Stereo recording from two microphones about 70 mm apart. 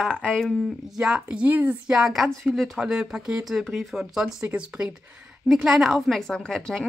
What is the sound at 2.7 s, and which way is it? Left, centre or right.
Speech, centre.